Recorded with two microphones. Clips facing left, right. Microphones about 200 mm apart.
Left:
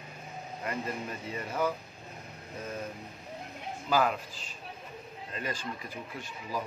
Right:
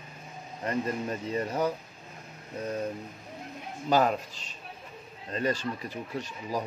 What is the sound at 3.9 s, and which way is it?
Speech, 40° right (ahead or behind).